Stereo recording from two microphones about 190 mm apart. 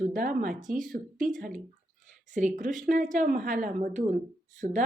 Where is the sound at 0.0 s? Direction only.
45° right (ahead or behind).